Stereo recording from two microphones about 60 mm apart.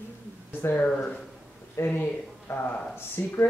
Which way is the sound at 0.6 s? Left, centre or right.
Left.